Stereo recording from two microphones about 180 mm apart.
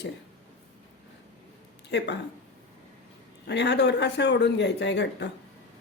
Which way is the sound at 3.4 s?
70° left (ahead or behind).